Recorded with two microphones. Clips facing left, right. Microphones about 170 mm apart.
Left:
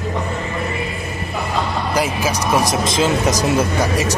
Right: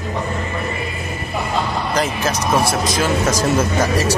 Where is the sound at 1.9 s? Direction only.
10° left (ahead or behind).